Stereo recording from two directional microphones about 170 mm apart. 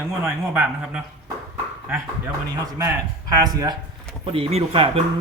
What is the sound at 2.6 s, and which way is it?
A man's voice, 20° right (ahead or behind).